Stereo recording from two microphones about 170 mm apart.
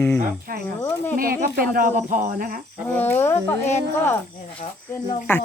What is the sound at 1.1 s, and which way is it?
Speech, 60° right (ahead or behind).